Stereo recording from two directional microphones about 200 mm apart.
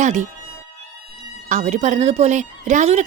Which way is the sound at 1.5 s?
35° right (ahead or behind).